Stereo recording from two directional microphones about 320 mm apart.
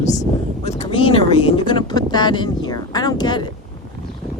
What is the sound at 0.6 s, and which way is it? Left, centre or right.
Speech, centre.